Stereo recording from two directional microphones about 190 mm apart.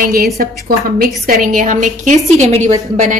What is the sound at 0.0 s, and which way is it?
A woman's voice, 50° right (ahead or behind).